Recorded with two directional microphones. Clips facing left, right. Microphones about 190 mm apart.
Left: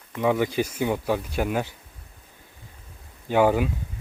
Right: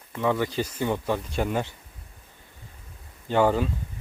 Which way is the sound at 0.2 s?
15° left (ahead or behind).